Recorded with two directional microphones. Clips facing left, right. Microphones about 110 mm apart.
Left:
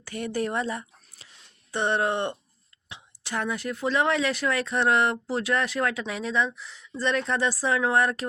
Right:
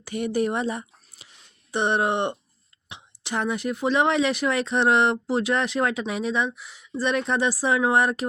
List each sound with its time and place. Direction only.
0.0 s speech: 15° right (ahead or behind)